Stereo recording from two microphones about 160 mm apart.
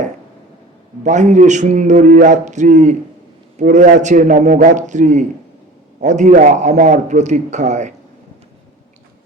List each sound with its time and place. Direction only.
1.0 s a man's voice: 50° right (ahead or behind)